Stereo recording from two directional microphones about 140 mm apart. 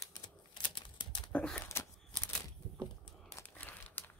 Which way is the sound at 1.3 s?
10° left (ahead or behind).